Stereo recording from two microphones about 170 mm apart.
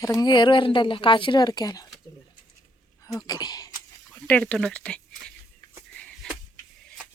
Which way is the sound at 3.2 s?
25° left (ahead or behind).